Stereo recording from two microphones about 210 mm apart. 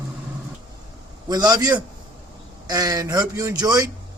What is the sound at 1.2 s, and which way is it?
A man's voice, 20° right (ahead or behind).